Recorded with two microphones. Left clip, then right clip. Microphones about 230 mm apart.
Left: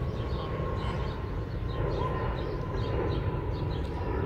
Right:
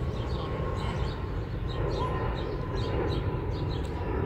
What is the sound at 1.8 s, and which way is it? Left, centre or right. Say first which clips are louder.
Crow: right 1 dB; left.